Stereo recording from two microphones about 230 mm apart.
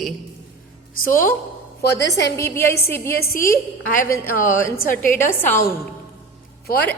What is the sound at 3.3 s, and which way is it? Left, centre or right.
A woman's voice, left.